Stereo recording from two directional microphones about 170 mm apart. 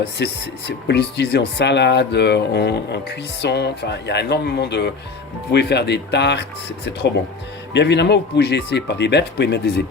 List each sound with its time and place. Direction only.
0.2 s speech: 80° left
7.7 s speech: 90° left